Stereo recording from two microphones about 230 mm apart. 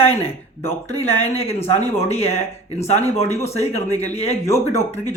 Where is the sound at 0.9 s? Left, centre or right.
Left.